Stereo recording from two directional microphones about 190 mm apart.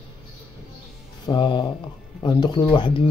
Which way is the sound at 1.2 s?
25° left (ahead or behind).